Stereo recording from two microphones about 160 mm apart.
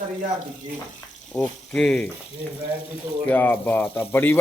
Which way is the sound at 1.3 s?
5° left (ahead or behind).